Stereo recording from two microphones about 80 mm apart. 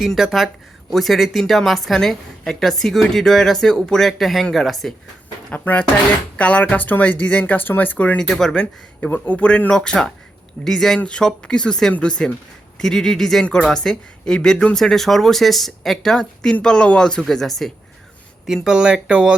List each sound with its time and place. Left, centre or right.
0.0 s speech: centre
5.5 s speech: left
8.2 s speech: centre
9.0 s speech: left; by 19.4 s centre